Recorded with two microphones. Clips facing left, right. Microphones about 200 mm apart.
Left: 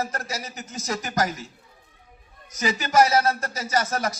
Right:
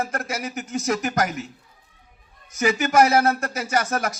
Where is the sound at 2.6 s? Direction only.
55° right (ahead or behind).